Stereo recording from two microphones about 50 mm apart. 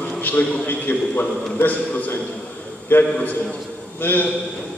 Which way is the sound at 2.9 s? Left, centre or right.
Left.